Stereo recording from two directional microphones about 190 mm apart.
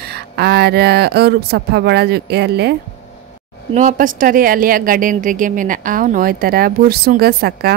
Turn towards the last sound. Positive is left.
turn(degrees=-55)  # may be behind; listen again after turning